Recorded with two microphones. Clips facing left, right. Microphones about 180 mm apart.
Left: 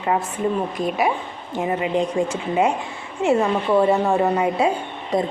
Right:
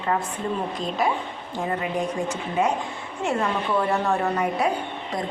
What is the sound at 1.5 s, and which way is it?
A woman's voice, 20° left (ahead or behind).